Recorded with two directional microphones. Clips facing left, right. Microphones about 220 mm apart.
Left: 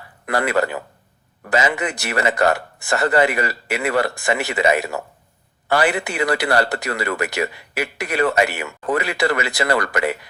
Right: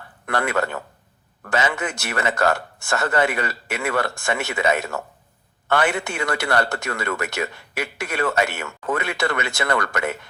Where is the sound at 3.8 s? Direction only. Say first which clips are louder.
Left 3 dB; 20° left (ahead or behind).